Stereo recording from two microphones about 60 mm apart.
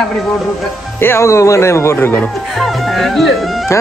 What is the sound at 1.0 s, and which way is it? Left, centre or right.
Speech, left.